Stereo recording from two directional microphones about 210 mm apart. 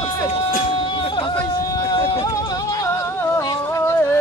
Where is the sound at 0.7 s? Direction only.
25° left (ahead or behind).